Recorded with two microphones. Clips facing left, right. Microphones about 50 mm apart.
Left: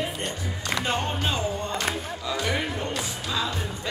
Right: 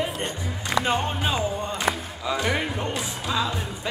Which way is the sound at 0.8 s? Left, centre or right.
Centre.